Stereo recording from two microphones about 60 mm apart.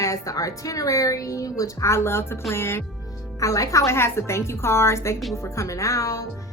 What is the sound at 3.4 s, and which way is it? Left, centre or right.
Speech, left.